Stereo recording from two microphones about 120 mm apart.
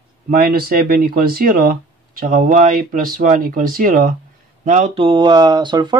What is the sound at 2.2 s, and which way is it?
Speech, 90° right.